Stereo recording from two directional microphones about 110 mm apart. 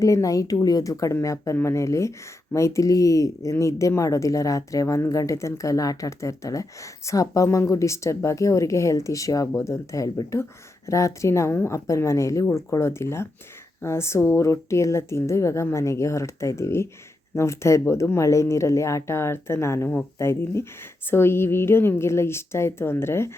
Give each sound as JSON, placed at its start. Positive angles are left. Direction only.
{"t": 0.0, "sound": "a woman's voice", "side_deg": 30}